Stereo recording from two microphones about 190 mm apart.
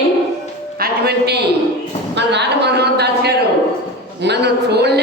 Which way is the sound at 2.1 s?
65° right (ahead or behind).